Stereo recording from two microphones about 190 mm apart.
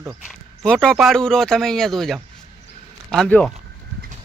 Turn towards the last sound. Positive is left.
turn(degrees=5)  # may be behind; listen again after turning